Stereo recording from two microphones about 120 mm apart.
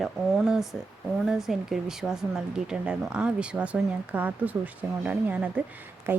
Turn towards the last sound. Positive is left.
turn(degrees=-15)  # may be behind; listen again after turning